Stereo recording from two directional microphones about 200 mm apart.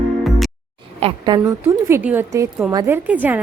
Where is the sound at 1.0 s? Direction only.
30° right (ahead or behind).